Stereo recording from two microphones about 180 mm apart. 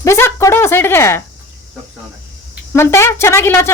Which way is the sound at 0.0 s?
15° left (ahead or behind).